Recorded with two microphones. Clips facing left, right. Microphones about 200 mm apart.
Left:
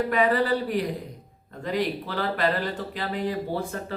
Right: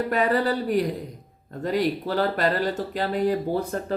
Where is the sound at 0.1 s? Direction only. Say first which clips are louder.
Right 1 dB; 45° right (ahead or behind).